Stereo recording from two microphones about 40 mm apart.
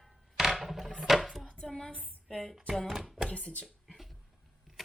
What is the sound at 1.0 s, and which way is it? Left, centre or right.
Chopping, centre.